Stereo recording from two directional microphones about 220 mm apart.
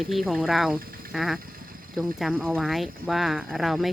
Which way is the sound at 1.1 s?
Centre (ahead or behind).